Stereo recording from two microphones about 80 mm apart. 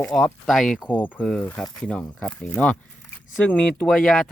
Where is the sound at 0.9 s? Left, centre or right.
Left.